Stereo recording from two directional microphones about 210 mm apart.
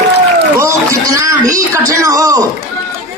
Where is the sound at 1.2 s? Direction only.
15° right (ahead or behind).